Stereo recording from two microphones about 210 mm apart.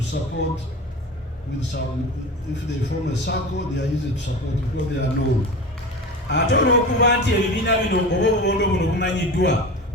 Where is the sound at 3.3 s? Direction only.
55° left (ahead or behind).